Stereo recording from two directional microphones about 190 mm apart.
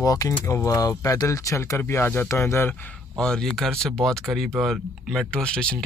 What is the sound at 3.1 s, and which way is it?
Speech, 5° left (ahead or behind).